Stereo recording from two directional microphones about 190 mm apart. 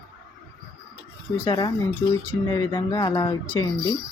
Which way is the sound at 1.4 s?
25° left (ahead or behind).